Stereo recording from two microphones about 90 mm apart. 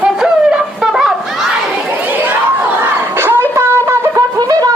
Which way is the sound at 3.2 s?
30° right (ahead or behind).